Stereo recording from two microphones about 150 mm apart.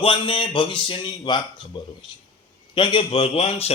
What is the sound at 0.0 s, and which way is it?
Speech, 35° left (ahead or behind).